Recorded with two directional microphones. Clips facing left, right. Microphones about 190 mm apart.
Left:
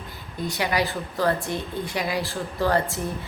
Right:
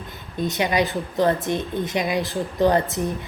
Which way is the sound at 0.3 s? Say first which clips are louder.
Right 4 dB; 20° right (ahead or behind).